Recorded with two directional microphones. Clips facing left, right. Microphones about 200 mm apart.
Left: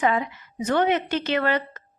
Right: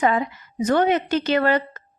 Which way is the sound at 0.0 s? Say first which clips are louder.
Right 2 dB; 40° right (ahead or behind).